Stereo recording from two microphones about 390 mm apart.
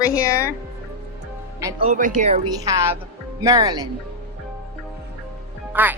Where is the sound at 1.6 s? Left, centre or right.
Centre.